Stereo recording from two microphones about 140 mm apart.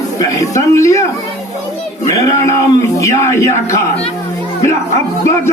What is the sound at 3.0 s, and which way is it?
Speech, 20° left (ahead or behind).